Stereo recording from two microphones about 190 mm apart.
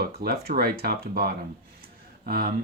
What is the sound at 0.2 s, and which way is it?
Speech, 55° right (ahead or behind).